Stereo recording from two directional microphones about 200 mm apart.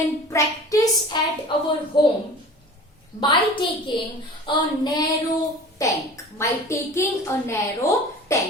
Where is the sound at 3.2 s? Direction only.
25° left (ahead or behind).